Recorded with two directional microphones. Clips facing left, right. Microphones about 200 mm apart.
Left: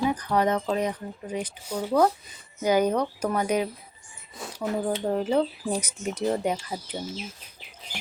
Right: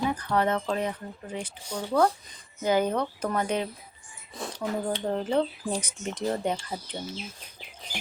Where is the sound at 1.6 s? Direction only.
5° left (ahead or behind).